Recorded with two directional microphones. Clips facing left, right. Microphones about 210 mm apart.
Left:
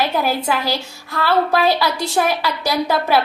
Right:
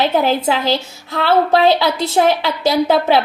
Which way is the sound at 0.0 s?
20° right (ahead or behind).